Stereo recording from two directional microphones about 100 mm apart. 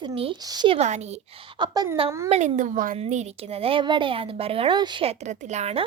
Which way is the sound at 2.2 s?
90° right.